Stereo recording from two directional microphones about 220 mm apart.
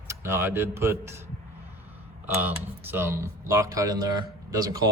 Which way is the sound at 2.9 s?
10° right (ahead or behind).